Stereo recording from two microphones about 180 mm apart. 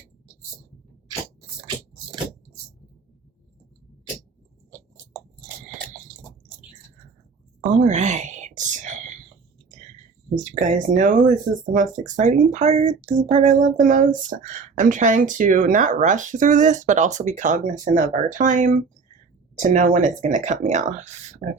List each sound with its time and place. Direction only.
7.8 s whispering: 40° right (ahead or behind)
10.3 s speech: 40° right (ahead or behind)